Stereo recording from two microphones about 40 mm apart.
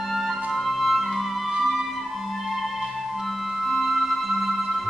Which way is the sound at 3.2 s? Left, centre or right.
Centre.